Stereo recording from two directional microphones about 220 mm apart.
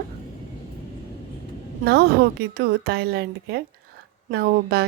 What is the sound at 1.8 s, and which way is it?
Speech, 50° right (ahead or behind).